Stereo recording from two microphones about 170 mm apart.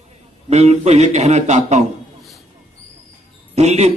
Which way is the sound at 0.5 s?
40° right (ahead or behind).